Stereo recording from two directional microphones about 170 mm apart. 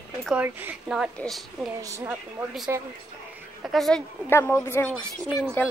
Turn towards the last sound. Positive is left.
turn(degrees=0)  # may be behind; listen again after turning